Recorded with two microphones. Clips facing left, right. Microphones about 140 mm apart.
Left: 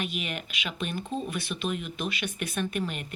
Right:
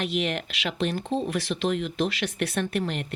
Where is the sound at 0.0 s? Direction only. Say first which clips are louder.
Right 6 dB; 80° right.